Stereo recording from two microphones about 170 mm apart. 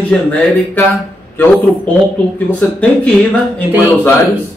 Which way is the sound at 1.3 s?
10° left (ahead or behind).